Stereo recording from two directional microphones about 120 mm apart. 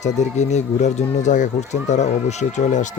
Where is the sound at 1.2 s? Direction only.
85° left.